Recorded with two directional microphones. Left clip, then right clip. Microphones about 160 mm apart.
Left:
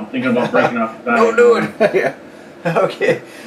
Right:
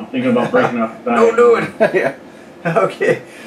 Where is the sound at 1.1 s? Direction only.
20° left (ahead or behind).